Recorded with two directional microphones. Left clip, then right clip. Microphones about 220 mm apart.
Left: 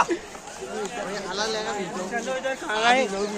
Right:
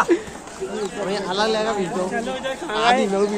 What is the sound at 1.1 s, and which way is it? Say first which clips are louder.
Speech: right 8 dB; 40° right (ahead or behind).